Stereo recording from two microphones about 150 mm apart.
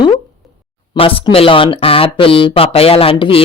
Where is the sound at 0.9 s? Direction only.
40° left (ahead or behind).